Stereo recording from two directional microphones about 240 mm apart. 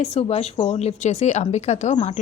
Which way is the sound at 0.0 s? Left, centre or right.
Left.